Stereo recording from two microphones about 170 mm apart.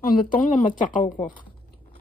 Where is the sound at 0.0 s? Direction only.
50° left (ahead or behind).